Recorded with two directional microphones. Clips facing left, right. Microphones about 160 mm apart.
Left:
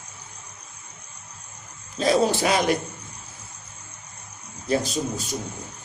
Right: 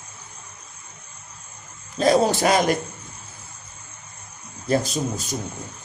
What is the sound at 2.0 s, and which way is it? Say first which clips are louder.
Speech: right 2 dB; 45° right (ahead or behind).